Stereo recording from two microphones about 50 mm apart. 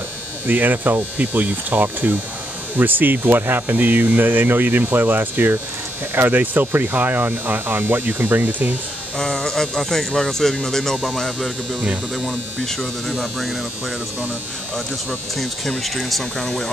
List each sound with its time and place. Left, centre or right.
0.5 s speech: right
9.2 s speech: centre
13.1 s speech: centre
15.8 s speech: centre